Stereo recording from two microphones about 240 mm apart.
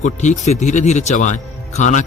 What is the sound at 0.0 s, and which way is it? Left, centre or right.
A man's voice, left.